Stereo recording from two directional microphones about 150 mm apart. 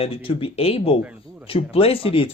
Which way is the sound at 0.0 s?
40° left (ahead or behind).